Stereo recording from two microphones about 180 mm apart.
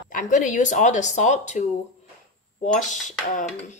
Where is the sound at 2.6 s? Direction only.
45° left (ahead or behind).